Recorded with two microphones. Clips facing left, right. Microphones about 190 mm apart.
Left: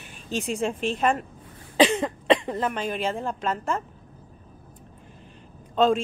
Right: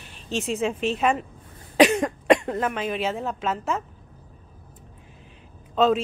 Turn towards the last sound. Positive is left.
turn(degrees=-5)  # may be behind; listen again after turning